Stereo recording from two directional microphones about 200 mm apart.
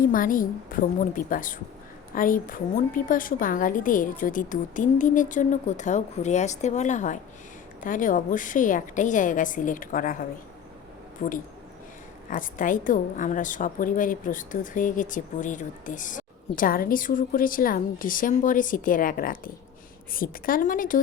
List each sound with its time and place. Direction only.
0.0 s a woman's voice: 45° left (ahead or behind)